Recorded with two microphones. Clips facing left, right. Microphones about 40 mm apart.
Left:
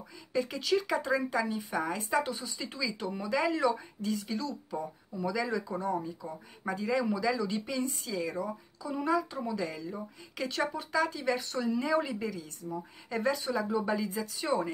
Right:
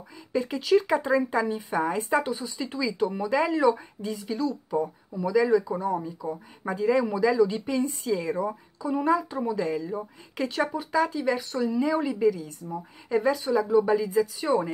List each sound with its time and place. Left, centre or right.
0.3 s speech: centre